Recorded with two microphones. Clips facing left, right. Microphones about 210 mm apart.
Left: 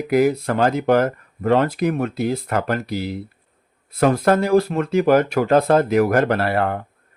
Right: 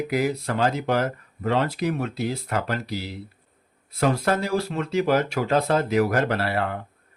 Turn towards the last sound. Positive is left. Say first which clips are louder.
# left 5 dB
turn(degrees=55)  # may be behind; listen again after turning